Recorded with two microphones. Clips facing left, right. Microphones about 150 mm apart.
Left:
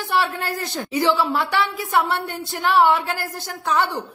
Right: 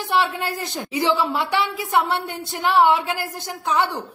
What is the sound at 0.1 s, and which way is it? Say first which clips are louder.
A woman's voice: right 1 dB; 20° right (ahead or behind).